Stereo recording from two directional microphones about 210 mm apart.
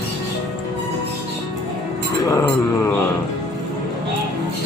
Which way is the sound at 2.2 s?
10° left (ahead or behind).